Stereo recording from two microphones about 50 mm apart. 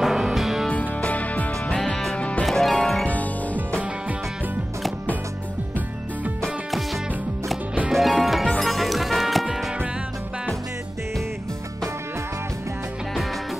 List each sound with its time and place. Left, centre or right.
0.0 s music: centre
0.7 s music: left
1.9 s music: centre
2.1 s music: left
2.4 s music: centre
2.7 s music: centre
7.9 s music: centre